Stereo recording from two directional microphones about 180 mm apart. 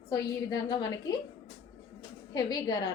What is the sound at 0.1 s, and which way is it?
Speech, 20° left (ahead or behind).